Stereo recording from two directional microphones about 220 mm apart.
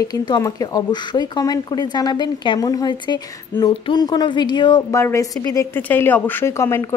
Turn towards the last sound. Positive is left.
turn(degrees=10)  # may be behind; listen again after turning